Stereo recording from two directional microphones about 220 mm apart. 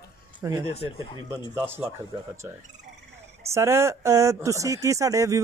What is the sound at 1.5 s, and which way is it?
Speech, 10° right (ahead or behind).